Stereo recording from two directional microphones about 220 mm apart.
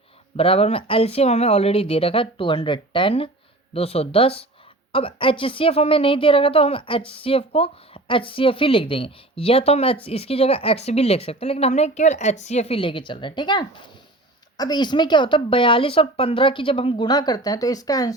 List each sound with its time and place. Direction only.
0.3 s a woman's voice: 25° left (ahead or behind)